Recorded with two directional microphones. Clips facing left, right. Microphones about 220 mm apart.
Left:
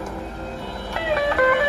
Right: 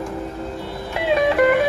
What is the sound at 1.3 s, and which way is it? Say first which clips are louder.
Music: right 3 dB; centre (ahead or behind).